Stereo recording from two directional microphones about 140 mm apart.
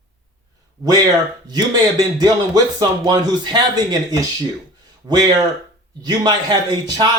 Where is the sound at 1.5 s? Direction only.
30° right (ahead or behind).